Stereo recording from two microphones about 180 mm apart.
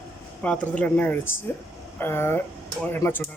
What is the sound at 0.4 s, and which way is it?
Speech, 5° left (ahead or behind).